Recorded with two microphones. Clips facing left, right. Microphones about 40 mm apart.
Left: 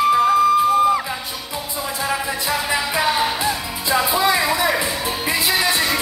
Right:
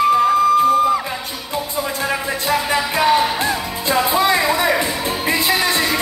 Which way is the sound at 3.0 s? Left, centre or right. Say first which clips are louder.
Right 5 dB; centre.